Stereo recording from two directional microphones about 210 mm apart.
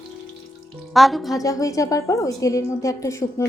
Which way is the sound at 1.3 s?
15° left (ahead or behind).